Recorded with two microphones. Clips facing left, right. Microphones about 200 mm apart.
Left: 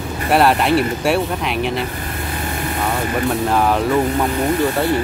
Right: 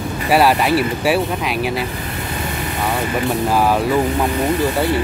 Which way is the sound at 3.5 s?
5° right (ahead or behind).